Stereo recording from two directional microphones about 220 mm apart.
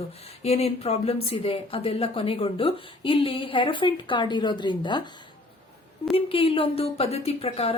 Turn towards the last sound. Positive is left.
turn(degrees=25)  # may be behind; listen again after turning